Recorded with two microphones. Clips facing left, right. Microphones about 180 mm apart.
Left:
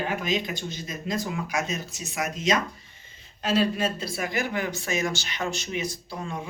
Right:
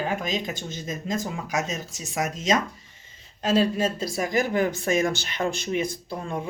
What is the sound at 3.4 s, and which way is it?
Speech, 40° right (ahead or behind).